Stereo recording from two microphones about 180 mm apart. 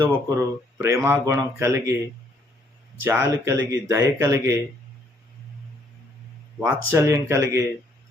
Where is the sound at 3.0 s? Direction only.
15° right (ahead or behind).